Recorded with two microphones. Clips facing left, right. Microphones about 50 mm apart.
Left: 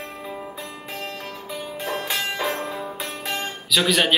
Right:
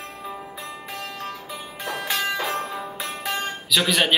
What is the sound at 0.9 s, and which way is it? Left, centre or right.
Music, left.